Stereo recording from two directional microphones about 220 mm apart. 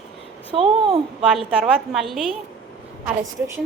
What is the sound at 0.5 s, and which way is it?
Speech, 25° right (ahead or behind).